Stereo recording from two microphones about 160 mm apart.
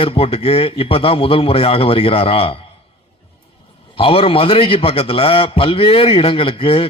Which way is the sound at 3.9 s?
35° left (ahead or behind).